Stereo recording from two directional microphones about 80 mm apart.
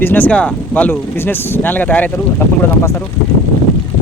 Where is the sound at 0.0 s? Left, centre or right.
Left.